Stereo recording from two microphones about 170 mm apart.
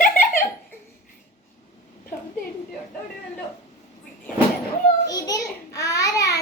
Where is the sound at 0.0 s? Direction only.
55° left (ahead or behind).